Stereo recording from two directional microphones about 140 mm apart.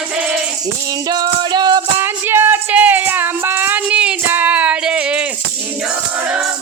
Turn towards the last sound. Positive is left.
turn(degrees=-10)  # may be behind; listen again after turning